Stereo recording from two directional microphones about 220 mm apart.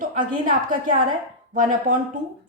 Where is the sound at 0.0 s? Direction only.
35° right (ahead or behind).